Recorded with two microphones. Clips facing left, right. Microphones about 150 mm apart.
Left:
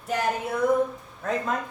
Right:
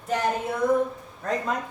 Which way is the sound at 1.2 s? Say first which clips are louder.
Even; 5° left (ahead or behind).